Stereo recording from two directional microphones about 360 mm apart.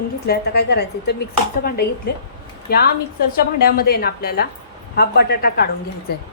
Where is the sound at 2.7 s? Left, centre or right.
Left.